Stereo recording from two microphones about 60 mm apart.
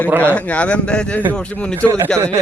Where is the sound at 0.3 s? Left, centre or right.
Left.